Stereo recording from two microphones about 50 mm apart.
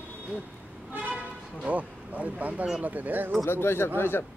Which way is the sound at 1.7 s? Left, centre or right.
Right.